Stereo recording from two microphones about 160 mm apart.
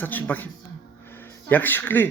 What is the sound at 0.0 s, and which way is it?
Speech, 10° left (ahead or behind).